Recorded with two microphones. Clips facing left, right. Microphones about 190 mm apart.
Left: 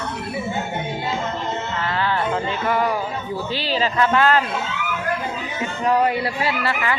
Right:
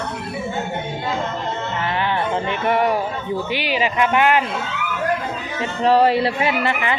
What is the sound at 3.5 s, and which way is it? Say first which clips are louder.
A man's voice: left 1 dB; 15° right (ahead or behind).